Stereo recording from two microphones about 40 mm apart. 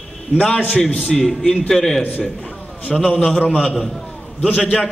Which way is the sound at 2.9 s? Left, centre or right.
Centre.